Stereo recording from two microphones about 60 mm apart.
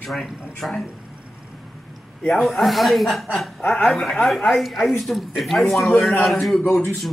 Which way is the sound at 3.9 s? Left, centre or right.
Centre.